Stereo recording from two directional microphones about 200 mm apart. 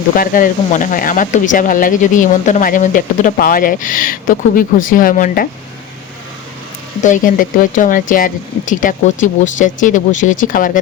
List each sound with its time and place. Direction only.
0.2 s speech: 45° left (ahead or behind)
7.0 s speech: 40° left (ahead or behind)